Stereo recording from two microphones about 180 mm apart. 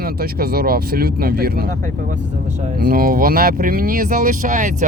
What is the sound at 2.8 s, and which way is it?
Speech, 60° right (ahead or behind).